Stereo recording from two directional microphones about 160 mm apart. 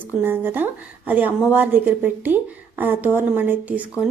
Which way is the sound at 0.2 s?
10° right (ahead or behind).